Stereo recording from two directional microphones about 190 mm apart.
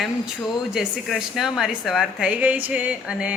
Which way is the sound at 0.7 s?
Centre (ahead or behind).